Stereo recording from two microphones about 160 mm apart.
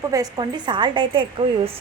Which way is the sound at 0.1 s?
25° right (ahead or behind).